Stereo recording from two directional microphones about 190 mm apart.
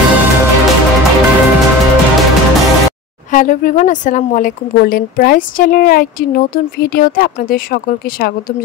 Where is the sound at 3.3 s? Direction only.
45° left (ahead or behind).